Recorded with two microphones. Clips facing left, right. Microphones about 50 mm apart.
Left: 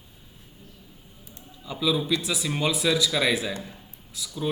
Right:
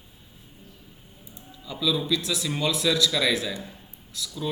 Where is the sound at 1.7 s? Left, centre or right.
Left.